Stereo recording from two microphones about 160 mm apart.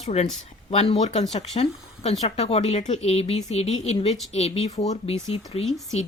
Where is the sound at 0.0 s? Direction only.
40° left (ahead or behind).